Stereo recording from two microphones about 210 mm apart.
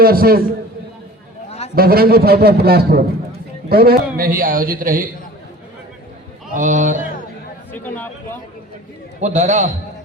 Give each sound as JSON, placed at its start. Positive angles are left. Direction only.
{"t": 0.0, "sound": "a man's voice", "side_deg": -45}
{"t": 1.5, "sound": "a sound", "side_deg": 30}
{"t": 1.7, "sound": "a man's voice", "side_deg": -45}
{"t": 6.5, "sound": "a man's voice", "side_deg": -35}
{"t": 7.7, "sound": "a man's voice", "side_deg": 10}
{"t": 9.2, "sound": "a man's voice", "side_deg": -35}